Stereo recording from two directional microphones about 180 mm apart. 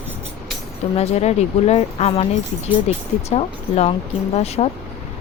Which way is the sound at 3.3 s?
35° left (ahead or behind).